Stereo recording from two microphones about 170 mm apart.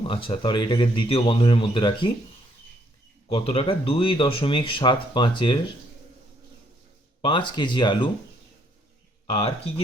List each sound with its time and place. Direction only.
0.0 s speech: 30° left (ahead or behind)
3.2 s speech: 35° left (ahead or behind)
7.2 s speech: 30° left (ahead or behind)
9.3 s speech: 35° left (ahead or behind)